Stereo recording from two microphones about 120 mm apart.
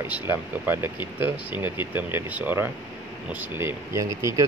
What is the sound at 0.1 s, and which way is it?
Speech, 20° right (ahead or behind).